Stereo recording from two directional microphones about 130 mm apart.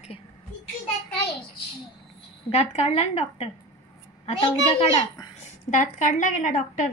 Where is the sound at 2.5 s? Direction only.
50° left (ahead or behind).